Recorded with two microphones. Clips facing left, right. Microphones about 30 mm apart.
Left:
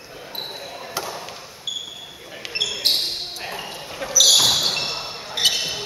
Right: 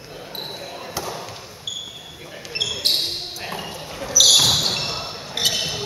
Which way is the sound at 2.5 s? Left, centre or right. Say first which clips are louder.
Left 1 dB; centre.